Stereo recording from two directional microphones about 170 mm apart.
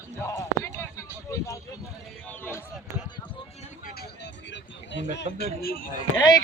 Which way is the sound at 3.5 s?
60° left (ahead or behind).